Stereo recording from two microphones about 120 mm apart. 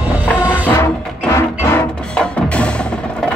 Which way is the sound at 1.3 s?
20° left (ahead or behind).